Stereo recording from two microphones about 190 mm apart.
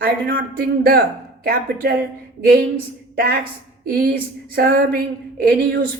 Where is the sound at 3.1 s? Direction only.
50° right (ahead or behind).